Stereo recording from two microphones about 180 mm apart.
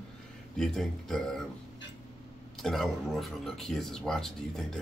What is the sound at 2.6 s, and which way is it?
Speech, centre (ahead or behind).